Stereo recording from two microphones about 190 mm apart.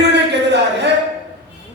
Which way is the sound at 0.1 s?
65° right (ahead or behind).